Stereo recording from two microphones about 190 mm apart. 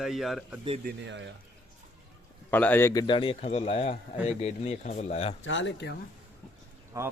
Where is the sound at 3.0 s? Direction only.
25° left (ahead or behind).